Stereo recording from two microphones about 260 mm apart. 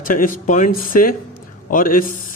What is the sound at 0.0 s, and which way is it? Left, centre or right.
Speech, left.